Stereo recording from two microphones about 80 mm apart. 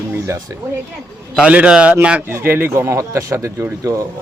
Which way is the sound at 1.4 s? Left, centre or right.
Centre.